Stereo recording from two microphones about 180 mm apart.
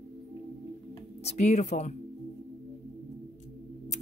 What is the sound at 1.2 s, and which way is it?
Speech, 40° left (ahead or behind).